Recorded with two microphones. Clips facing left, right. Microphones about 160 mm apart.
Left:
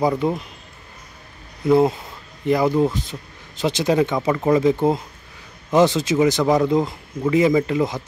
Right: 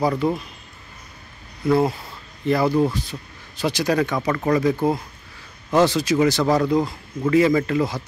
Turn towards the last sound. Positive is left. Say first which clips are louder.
# left 1 dB
turn(degrees=20)  # may be behind; listen again after turning